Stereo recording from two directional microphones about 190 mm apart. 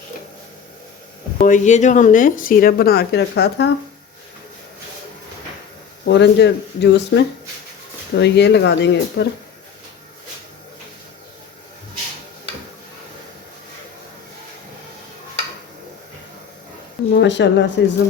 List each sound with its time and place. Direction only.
1.4 s speech: 40° left (ahead or behind); by 3.7 s 60° left (ahead or behind)
6.1 s speech: 65° left (ahead or behind)
17.2 s speech: 70° left (ahead or behind)